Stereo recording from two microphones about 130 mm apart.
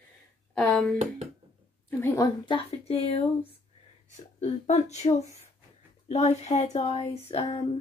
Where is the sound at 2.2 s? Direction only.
40° left (ahead or behind).